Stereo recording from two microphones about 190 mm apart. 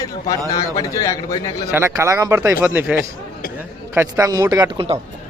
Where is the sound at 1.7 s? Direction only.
15° right (ahead or behind).